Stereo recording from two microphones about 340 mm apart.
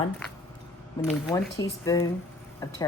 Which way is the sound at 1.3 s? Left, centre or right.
Centre.